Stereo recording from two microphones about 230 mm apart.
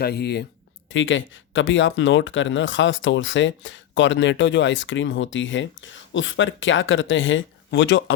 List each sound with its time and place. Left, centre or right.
0.0 s speech: left